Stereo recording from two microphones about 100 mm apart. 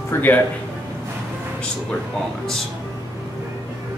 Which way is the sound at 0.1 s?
25° left (ahead or behind).